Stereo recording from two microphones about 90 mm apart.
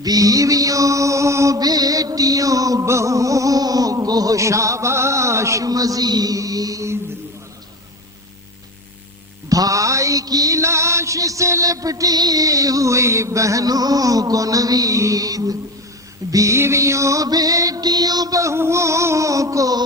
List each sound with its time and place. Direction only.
0.0 s mantra: 40° right (ahead or behind)
9.5 s music: 40° right (ahead or behind)